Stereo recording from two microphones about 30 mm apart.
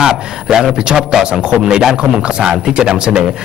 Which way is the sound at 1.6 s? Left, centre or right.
Right.